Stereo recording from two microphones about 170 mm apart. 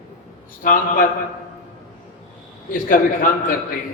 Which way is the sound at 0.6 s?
55° left (ahead or behind).